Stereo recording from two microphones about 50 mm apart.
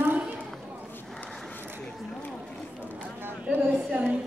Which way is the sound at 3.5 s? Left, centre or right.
Right.